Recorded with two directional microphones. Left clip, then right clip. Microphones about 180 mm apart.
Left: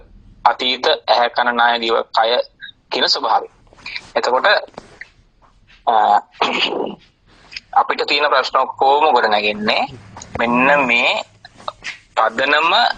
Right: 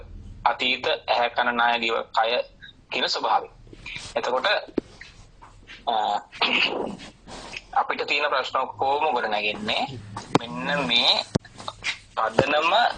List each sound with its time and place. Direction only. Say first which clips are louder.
0.4 s a man's voice: left 8 dB; 40° left (ahead or behind)
5.8 s a man's voice: left 11 dB; 40° left (ahead or behind)
11.0 s speech: left 4 dB; 20° left (ahead or behind)
11.7 s a sound: left 8 dB; 40° left (ahead or behind)
12.1 s a man's voice: left 7 dB; 40° left (ahead or behind)